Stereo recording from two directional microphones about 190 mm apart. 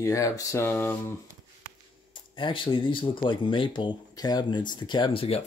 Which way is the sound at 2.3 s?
25° left (ahead or behind).